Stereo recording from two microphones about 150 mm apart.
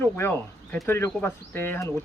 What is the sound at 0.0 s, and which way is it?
Speech, 15° left (ahead or behind).